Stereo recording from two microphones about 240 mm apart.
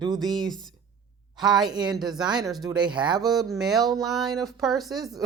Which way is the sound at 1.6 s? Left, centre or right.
Centre.